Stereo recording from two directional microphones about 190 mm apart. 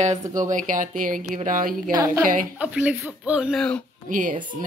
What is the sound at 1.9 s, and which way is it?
Speech, 20° right (ahead or behind).